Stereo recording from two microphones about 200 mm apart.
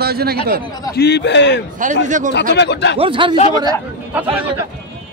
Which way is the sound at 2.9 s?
25° right (ahead or behind).